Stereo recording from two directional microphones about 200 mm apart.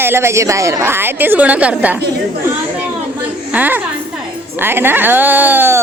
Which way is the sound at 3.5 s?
10° right (ahead or behind).